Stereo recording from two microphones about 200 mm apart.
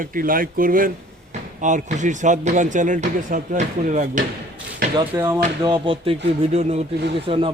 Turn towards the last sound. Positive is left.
turn(degrees=-25)  # may be behind; listen again after turning